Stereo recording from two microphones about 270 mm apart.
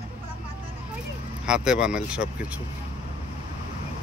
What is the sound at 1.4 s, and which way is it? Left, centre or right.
Speech, centre.